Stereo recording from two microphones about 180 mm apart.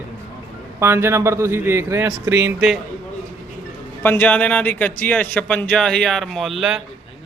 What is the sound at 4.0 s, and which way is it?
A man's voice, 10° left (ahead or behind).